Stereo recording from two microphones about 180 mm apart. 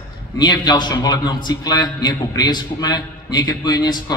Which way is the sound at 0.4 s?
25° left (ahead or behind).